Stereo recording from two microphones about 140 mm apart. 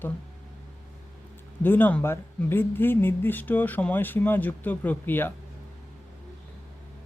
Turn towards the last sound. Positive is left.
turn(degrees=15)  # may be behind; listen again after turning